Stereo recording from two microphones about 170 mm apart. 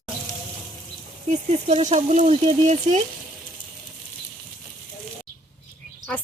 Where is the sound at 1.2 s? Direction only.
40° right (ahead or behind).